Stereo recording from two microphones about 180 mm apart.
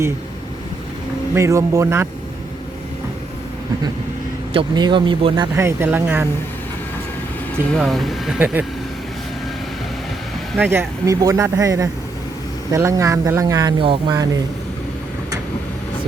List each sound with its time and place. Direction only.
1.4 s speech: 15° right (ahead or behind)
4.5 s speech: 25° right (ahead or behind)
5.5 s speech: 15° right (ahead or behind)
7.7 s speech: centre (ahead or behind)
10.6 s speech: 15° right (ahead or behind)